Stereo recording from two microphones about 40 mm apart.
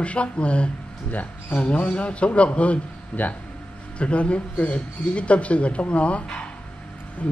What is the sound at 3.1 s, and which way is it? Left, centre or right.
Speech, left.